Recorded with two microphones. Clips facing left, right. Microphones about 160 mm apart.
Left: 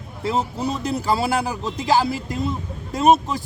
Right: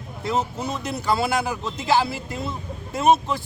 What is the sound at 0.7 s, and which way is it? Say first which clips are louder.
Speech: left 2 dB; 35° left (ahead or behind).